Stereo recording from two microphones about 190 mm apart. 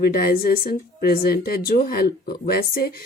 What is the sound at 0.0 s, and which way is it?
Speech, 55° left (ahead or behind).